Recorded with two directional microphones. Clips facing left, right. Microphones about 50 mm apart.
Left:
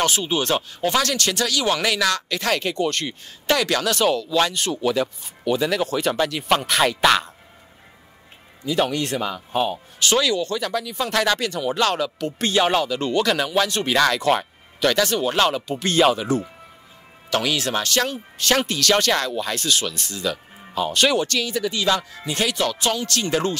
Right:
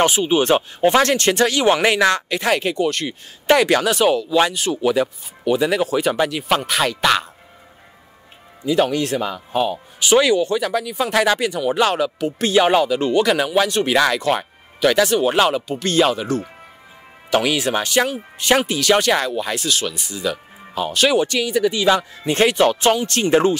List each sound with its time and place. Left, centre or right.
0.0 s speech: centre
3.4 s speech: right; by 7.2 s centre
8.6 s speech: centre
9.9 s speech: centre
17.3 s speech: centre
22.2 s speech: right; by 23.6 s centre